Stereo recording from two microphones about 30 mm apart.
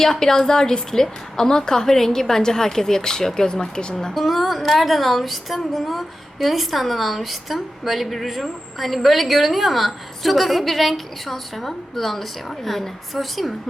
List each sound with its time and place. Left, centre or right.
0.0 s a woman's voice: centre
4.1 s a woman's voice: centre